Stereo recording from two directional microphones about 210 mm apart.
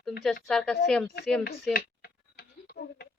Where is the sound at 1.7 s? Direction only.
50° left (ahead or behind).